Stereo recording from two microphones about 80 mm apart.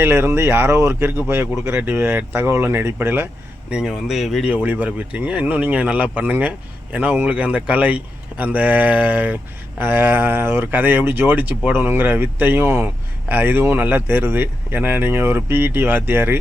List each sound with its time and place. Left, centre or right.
0.0 s speech: right
3.7 s speech: centre
4.5 s speech: centre